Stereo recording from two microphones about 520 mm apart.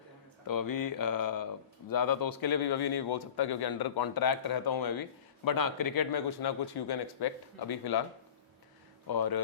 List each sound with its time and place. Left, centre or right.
0.4 s a man's voice: left
9.0 s a man's voice: left